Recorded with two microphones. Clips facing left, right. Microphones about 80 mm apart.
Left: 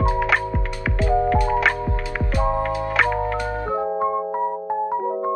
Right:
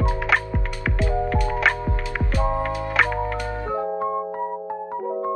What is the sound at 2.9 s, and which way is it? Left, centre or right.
Music, centre.